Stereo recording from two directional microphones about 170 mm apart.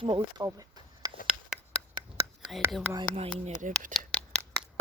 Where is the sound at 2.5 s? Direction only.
Centre (ahead or behind).